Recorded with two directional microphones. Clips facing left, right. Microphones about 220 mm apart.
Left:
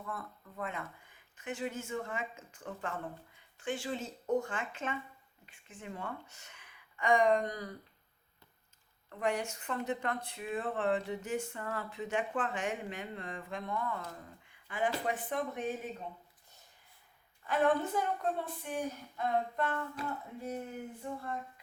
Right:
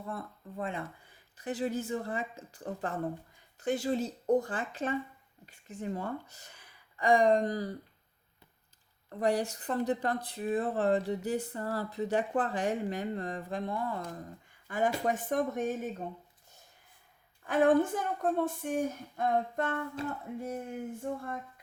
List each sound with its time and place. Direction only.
0.0 s speech: 30° right (ahead or behind)
9.0 s speech: 35° right (ahead or behind)
14.7 s a woman's voice: 45° right (ahead or behind)
17.4 s a woman's voice: 50° right (ahead or behind)
20.0 s a sound: 25° right (ahead or behind)
20.9 s a woman's voice: 45° right (ahead or behind)